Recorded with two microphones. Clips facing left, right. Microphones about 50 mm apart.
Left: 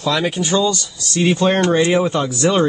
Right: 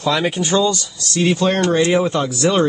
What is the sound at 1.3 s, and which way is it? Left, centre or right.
Speech, left.